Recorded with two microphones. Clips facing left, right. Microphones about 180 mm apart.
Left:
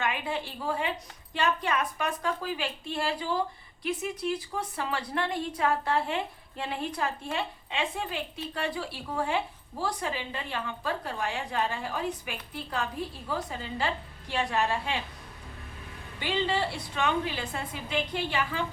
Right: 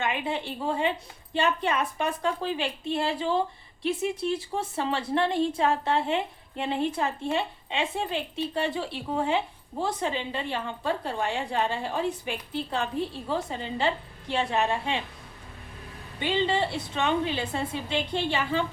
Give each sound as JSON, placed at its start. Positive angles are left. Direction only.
{"t": 0.0, "sound": "a woman's voice", "side_deg": -20}
{"t": 16.2, "sound": "a woman's voice", "side_deg": -20}